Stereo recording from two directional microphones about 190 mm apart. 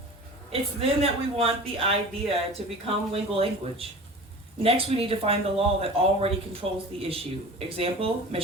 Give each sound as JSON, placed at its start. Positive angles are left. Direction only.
{"t": 0.5, "sound": "speech", "side_deg": -30}